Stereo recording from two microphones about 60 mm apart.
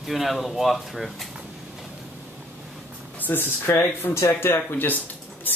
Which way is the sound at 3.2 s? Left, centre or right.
Left.